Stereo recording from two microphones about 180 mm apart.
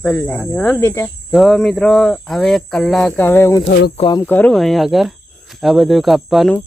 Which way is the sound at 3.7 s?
65° left (ahead or behind).